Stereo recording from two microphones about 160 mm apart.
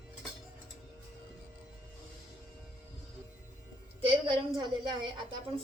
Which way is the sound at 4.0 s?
30° right (ahead or behind).